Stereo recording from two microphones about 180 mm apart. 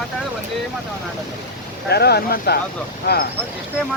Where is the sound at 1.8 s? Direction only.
65° left (ahead or behind).